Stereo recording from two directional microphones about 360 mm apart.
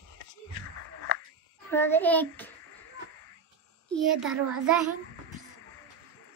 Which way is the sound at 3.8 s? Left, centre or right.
Centre.